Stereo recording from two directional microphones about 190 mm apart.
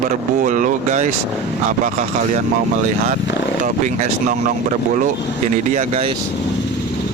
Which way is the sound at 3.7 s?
40° right (ahead or behind).